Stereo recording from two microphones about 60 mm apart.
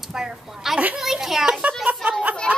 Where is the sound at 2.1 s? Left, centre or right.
Right.